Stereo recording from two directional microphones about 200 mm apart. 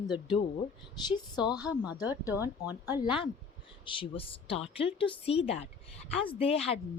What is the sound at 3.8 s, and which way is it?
A woman's voice, 25° left (ahead or behind).